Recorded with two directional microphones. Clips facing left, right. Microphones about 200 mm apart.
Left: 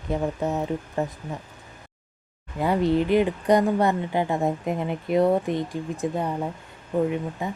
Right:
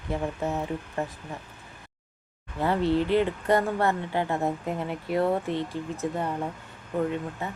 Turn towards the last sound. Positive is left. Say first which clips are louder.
# left 4 dB
turn(degrees=15)  # may be behind; listen again after turning